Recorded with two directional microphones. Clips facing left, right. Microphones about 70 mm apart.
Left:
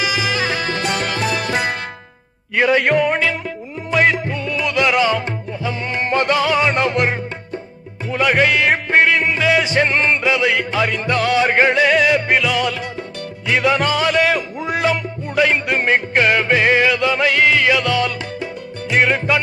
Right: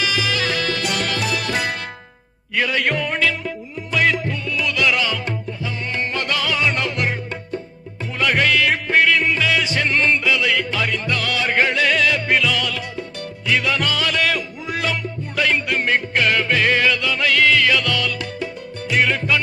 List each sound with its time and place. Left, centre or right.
0.0 s music: centre
8.1 s music: centre